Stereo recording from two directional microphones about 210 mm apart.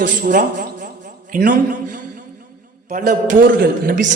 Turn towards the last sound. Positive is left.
turn(degrees=-40)  # may be behind; listen again after turning